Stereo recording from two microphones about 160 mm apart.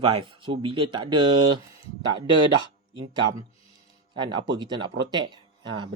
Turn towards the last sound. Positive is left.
turn(degrees=-30)  # may be behind; listen again after turning